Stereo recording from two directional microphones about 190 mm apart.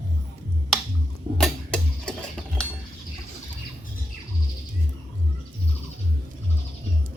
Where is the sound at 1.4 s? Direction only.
Centre (ahead or behind).